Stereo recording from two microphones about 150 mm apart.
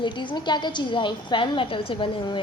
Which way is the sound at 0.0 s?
30° left (ahead or behind).